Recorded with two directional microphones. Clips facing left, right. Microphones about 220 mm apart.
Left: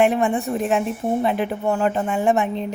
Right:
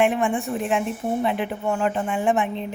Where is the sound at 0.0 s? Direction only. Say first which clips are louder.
Left 3 dB; 40° left (ahead or behind).